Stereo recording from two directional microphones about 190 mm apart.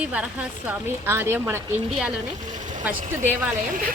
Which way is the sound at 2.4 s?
40° right (ahead or behind).